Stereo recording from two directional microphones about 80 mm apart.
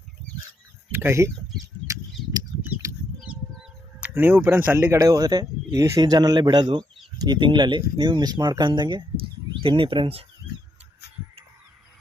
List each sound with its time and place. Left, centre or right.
0.9 s speech: right
2.6 s a sound: right
3.2 s bird: centre
4.1 s speech: right
4.9 s speech: right
6.0 s speech: right
9.7 s speech: right